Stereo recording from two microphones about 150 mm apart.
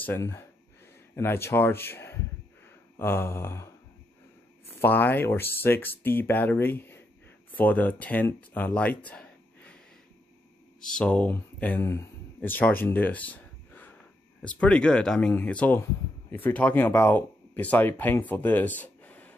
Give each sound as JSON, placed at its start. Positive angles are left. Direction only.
{"t": 0.0, "sound": "speech", "side_deg": 15}
{"t": 4.7, "sound": "speech", "side_deg": 10}
{"t": 11.0, "sound": "speech", "side_deg": 10}